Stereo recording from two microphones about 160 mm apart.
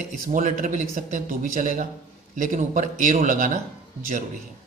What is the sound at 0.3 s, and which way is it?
Speech, 55° right (ahead or behind).